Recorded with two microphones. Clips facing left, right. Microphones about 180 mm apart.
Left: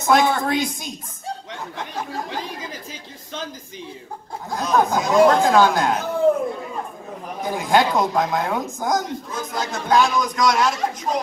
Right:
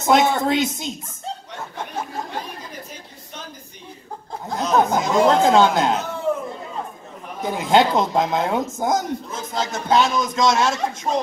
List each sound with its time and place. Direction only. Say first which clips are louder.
0.0 s speech: right 1 dB; 20° right (ahead or behind)
1.5 s chatter: even; 90° left
4.6 s speech: right 1 dB; 25° right (ahead or behind)
7.4 s speech: right 2 dB; 25° right (ahead or behind)